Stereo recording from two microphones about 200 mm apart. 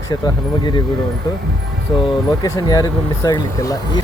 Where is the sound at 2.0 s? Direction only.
20° left (ahead or behind).